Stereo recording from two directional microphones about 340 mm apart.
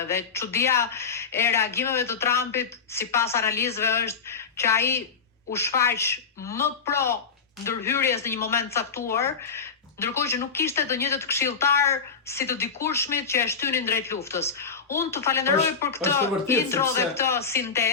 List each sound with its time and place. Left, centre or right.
0.1 s speech: centre